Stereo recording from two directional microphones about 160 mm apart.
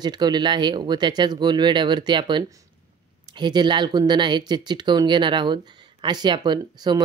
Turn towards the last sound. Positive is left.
turn(degrees=-25)  # may be behind; listen again after turning